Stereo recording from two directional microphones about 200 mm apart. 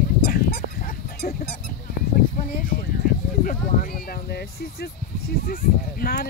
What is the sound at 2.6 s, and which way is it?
Speech, 45° left (ahead or behind).